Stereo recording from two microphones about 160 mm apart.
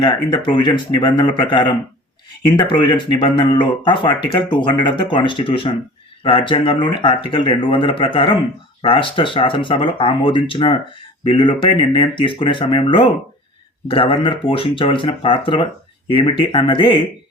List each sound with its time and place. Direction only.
0.4 s speech: 30° left (ahead or behind)